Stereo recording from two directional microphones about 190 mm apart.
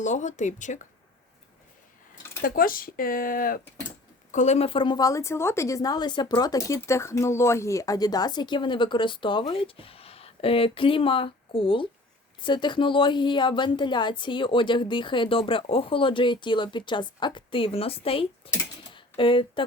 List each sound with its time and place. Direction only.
0.0 s speech: 40° left (ahead or behind)
2.4 s a woman's voice: 50° left (ahead or behind); by 19.6 s 25° left (ahead or behind)